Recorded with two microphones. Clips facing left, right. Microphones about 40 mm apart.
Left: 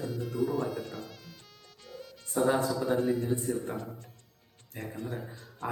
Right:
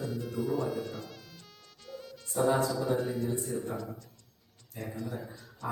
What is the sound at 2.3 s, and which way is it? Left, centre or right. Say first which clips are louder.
A man's voice: even; left.